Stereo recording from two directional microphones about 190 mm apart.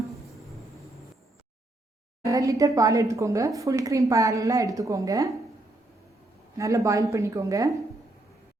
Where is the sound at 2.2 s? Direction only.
15° right (ahead or behind).